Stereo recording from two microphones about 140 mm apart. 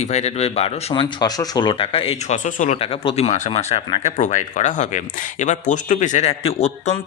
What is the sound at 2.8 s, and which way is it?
Speech, 45° left (ahead or behind).